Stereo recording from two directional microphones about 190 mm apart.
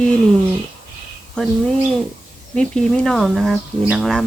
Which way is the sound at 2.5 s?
5° left (ahead or behind).